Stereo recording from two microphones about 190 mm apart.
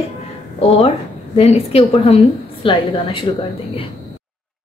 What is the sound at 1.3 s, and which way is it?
A woman's voice, 35° left (ahead or behind).